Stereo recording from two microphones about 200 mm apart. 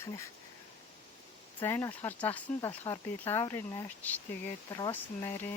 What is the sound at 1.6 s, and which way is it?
Speech, 10° left (ahead or behind).